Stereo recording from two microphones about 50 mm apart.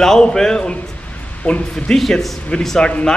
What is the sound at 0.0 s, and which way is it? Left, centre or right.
A man's voice, centre.